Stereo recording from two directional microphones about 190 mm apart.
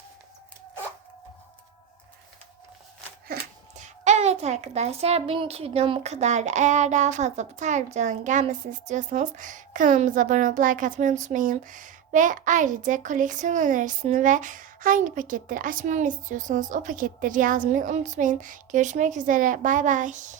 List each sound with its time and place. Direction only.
3.8 s a woman's voice: 35° right (ahead or behind)